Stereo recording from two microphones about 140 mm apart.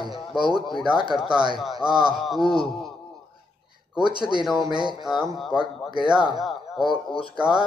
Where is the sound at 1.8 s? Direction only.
30° right (ahead or behind).